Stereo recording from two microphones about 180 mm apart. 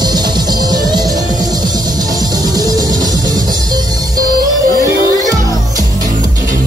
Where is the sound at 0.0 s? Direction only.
20° right (ahead or behind).